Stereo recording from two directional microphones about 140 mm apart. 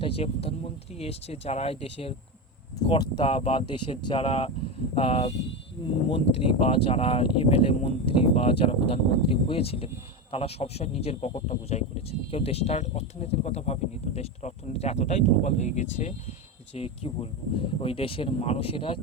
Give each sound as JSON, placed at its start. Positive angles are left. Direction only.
{"t": 0.0, "sound": "speech", "side_deg": 45}
{"t": 16.7, "sound": "speech", "side_deg": 45}